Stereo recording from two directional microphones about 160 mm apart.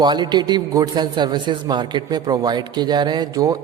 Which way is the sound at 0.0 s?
25° right (ahead or behind).